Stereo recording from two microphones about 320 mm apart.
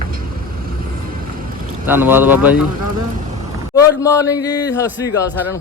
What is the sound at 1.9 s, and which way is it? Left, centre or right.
Speech, centre.